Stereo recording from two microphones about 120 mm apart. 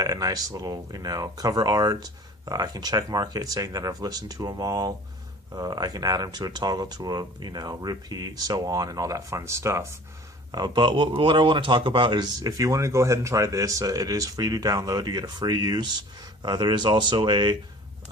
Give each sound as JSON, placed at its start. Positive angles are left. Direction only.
{"t": 0.0, "sound": "a man's voice", "side_deg": -30}
{"t": 10.5, "sound": "a man's voice", "side_deg": -35}